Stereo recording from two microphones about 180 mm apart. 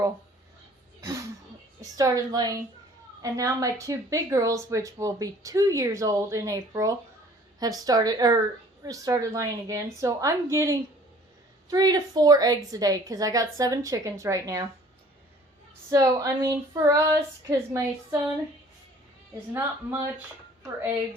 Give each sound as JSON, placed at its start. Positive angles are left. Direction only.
{"t": 1.8, "sound": "speech", "side_deg": -20}
{"t": 15.9, "sound": "speech", "side_deg": -20}
{"t": 19.5, "sound": "speech", "side_deg": -15}